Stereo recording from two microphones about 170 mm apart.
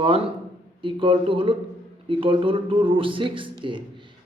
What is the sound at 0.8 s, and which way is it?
Speech, 30° right (ahead or behind).